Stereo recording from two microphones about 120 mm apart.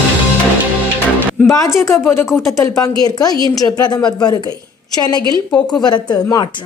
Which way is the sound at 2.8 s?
30° left (ahead or behind).